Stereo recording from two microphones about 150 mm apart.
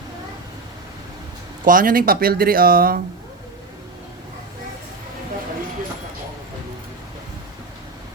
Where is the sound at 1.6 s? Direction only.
65° right (ahead or behind).